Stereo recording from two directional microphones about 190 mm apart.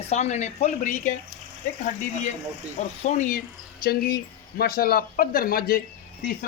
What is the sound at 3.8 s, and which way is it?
Speech, 50° left (ahead or behind).